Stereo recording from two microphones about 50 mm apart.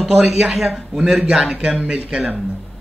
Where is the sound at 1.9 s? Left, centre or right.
Centre.